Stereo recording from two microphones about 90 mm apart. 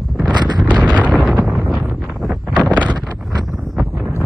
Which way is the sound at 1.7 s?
Centre (ahead or behind).